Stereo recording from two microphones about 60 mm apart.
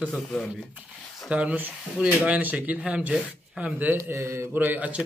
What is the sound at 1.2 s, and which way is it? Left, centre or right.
Speech, right.